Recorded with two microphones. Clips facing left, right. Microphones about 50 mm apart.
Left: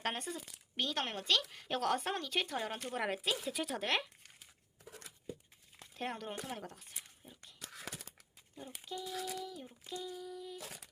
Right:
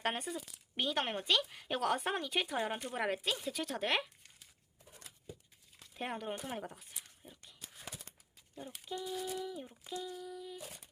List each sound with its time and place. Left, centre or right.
0.0 s speech: centre
4.9 s a sound: left
5.9 s speech: centre
7.2 s dog: centre
7.6 s a sound: left
8.9 s speech: centre
9.9 s speech: centre
10.6 s humming: left